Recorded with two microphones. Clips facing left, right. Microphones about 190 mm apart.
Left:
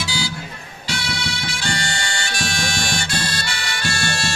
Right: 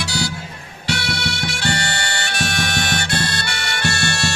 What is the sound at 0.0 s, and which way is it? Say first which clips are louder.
Music: right 2 dB; 65° right (ahead or behind).